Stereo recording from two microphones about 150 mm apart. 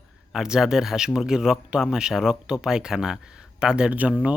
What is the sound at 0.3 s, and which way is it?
Speech, 5° right (ahead or behind).